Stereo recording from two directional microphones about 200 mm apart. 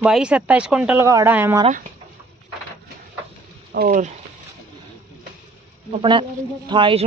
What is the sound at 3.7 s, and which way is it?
Speech, 45° right (ahead or behind).